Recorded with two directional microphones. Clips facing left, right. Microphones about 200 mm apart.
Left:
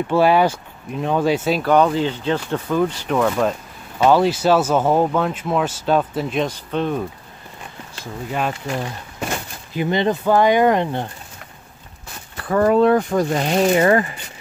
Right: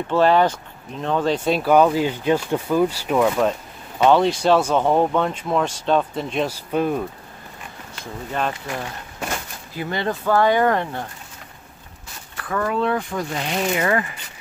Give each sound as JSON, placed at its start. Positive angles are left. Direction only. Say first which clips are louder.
{"t": 0.1, "sound": "speech", "louder": "left 1 dB", "side_deg": 10}
{"t": 1.6, "sound": "speech", "louder": "right 2 dB", "side_deg": -5}
{"t": 6.4, "sound": "speech", "louder": "right 1 dB", "side_deg": -10}
{"t": 8.0, "sound": "speech", "louder": "left 2 dB", "side_deg": 10}
{"t": 9.8, "sound": "speech", "louder": "left 6 dB", "side_deg": 20}
{"t": 12.4, "sound": "speech", "louder": "left 8 dB", "side_deg": 35}